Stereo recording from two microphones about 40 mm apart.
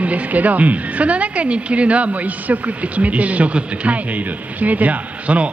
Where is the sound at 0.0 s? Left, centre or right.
Right.